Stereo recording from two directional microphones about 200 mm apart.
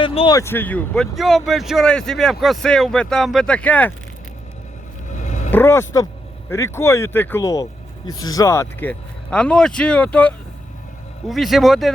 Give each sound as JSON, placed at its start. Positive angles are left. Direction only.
{"t": 0.0, "sound": "a sound", "side_deg": 25}
{"t": 0.3, "sound": "speech", "side_deg": 10}
{"t": 5.1, "sound": "vehicle", "side_deg": 35}
{"t": 5.5, "sound": "speech", "side_deg": 10}